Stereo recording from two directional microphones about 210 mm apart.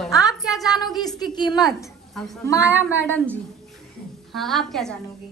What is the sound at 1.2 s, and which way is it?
Speech, 20° left (ahead or behind).